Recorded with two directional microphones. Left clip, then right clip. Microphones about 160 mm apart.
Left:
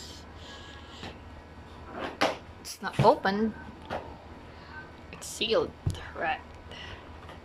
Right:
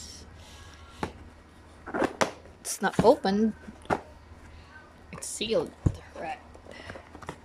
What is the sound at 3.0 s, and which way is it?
Speech, 30° right (ahead or behind).